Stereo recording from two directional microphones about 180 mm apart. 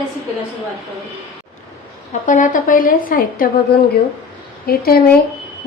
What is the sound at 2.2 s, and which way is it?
A woman's voice, 45° left (ahead or behind).